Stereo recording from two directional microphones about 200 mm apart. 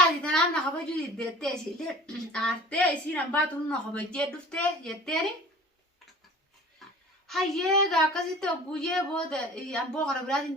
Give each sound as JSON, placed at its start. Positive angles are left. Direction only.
{"t": 0.2, "sound": "a woman's voice", "side_deg": 5}
{"t": 6.8, "sound": "a sound", "side_deg": 0}
{"t": 7.3, "sound": "a woman's voice", "side_deg": 0}